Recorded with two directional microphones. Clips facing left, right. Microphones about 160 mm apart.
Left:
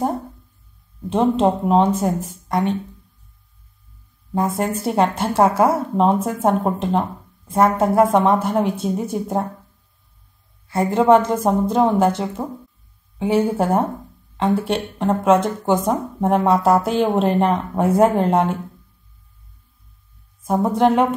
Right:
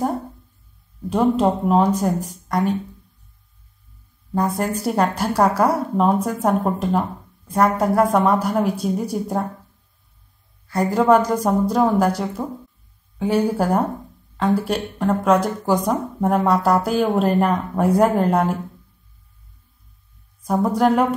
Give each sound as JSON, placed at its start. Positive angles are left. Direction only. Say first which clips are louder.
{"t": 1.1, "sound": "a woman's voice", "louder": "left 1 dB", "side_deg": 25}
{"t": 2.4, "sound": "a sound", "louder": "left 1 dB", "side_deg": 25}
{"t": 4.6, "sound": "a woman's voice", "louder": "left 3 dB", "side_deg": 25}
{"t": 10.7, "sound": "a woman's voice", "louder": "left 2 dB", "side_deg": 25}
{"t": 20.6, "sound": "a woman's voice", "louder": "left 1 dB", "side_deg": 25}